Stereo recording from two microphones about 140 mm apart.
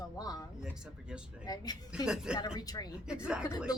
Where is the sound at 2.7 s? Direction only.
25° left (ahead or behind).